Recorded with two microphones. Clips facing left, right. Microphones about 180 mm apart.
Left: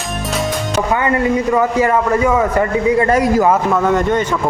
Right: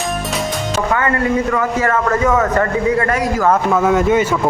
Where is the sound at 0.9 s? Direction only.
20° left (ahead or behind).